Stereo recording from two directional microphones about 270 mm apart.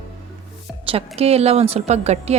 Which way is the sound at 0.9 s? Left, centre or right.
Right.